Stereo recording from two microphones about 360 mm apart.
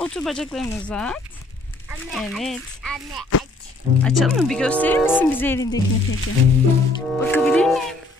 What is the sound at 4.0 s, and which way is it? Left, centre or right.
Speech, centre.